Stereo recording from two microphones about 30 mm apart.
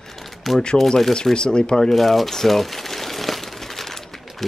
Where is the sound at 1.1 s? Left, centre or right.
Left.